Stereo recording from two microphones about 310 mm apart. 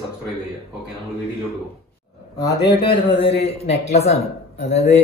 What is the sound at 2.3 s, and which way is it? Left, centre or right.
Speech, centre.